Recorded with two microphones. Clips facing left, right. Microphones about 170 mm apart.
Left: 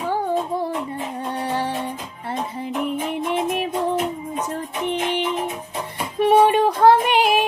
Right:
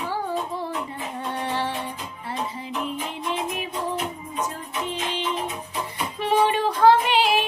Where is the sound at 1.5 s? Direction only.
45° left (ahead or behind).